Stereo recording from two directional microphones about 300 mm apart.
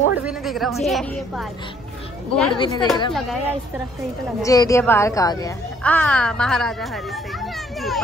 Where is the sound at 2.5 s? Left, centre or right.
Centre.